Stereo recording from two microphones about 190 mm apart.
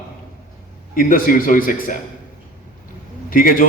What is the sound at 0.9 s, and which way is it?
A man's voice, 45° left (ahead or behind).